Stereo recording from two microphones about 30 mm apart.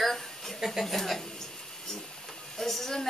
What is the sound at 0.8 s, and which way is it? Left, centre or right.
Speech, centre.